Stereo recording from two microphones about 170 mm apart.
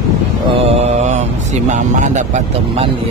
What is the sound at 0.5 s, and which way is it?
Speech, 35° right (ahead or behind).